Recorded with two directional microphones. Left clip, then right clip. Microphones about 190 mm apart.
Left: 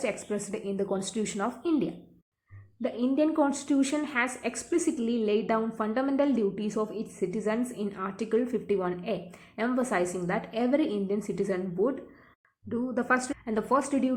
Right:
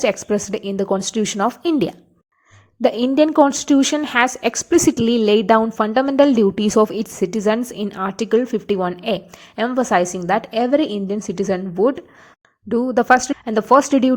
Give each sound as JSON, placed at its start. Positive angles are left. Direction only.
{"t": 0.0, "sound": "a woman's voice", "side_deg": -45}
{"t": 2.8, "sound": "a woman's voice", "side_deg": -50}